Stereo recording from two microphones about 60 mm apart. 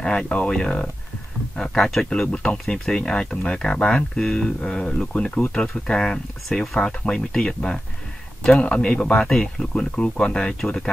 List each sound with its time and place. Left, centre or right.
0.0 s speech: centre
2.2 s speech: centre